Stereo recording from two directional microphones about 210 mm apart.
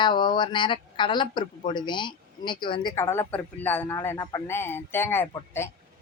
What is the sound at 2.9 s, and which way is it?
A woman's voice, 10° left (ahead or behind).